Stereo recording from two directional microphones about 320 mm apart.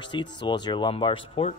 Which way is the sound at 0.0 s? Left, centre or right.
Centre.